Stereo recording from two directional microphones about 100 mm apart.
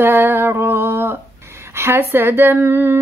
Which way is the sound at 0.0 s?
20° right (ahead or behind).